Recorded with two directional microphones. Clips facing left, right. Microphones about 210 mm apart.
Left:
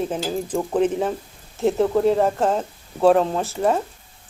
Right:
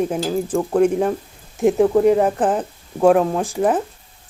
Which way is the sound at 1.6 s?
15° right (ahead or behind).